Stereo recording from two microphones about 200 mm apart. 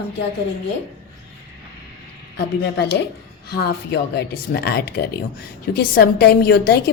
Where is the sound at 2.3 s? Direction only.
55° left (ahead or behind).